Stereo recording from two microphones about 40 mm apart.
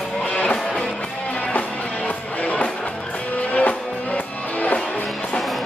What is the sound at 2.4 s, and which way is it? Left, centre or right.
Music, left.